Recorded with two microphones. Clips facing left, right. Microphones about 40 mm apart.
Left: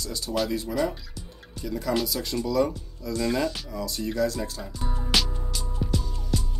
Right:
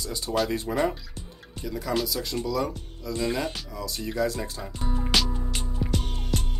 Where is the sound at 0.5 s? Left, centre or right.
Right.